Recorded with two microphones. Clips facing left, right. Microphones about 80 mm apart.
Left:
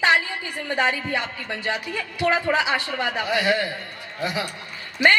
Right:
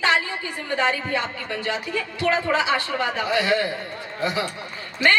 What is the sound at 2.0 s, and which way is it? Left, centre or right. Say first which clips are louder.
A woman's voice: even; left.